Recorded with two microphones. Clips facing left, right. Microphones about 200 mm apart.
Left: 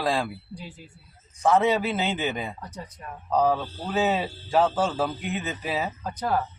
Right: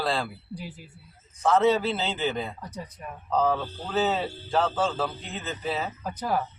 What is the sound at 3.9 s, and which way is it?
A man's voice, 10° left (ahead or behind).